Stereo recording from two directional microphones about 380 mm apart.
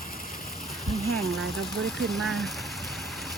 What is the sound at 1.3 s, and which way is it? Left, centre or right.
Speech, centre.